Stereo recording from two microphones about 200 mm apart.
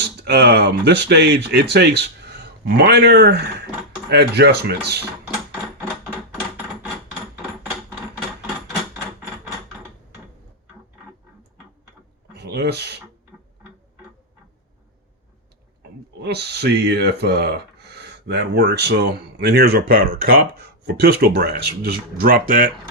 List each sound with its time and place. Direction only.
0.2 s speech: 55° right (ahead or behind)
12.4 s a sound: 55° right (ahead or behind)
16.2 s speech: 55° right (ahead or behind)